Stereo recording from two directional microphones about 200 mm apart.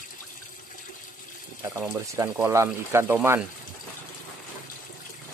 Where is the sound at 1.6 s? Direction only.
15° right (ahead or behind).